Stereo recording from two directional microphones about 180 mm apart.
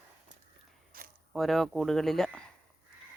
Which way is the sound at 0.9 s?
50° right (ahead or behind).